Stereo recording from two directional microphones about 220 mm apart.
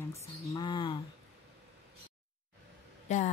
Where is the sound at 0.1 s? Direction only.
20° left (ahead or behind).